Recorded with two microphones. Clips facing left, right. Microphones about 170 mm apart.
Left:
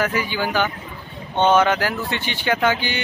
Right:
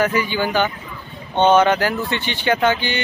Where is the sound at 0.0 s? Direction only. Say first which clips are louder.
Right 3 dB; 5° left (ahead or behind).